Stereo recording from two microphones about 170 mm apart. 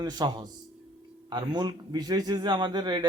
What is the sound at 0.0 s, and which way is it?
Speech, 25° right (ahead or behind).